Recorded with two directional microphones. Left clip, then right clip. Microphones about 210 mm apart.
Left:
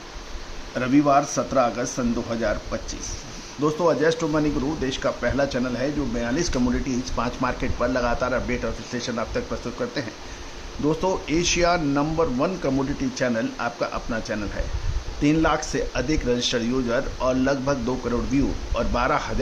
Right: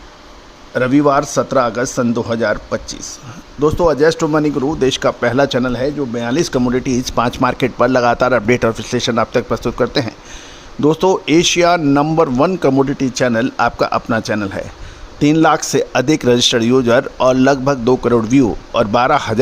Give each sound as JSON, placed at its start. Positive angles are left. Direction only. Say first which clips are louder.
{"t": 0.7, "sound": "speech", "louder": "right 6 dB", "side_deg": -50}